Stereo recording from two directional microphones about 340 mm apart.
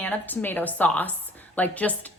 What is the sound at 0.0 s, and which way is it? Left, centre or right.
A woman's voice, centre.